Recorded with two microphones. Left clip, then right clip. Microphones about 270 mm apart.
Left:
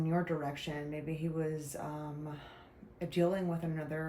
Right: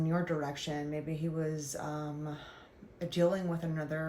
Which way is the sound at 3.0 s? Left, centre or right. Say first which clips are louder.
Right 2 dB; centre.